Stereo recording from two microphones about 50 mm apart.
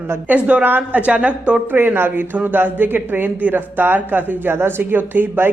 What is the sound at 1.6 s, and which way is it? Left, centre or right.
Speech, right.